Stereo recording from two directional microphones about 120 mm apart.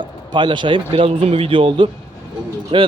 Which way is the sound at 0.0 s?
40° right (ahead or behind).